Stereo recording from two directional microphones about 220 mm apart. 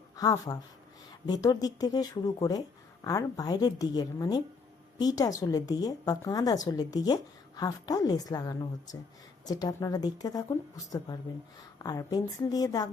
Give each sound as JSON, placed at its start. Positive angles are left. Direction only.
{"t": 0.2, "sound": "a woman's voice", "side_deg": 15}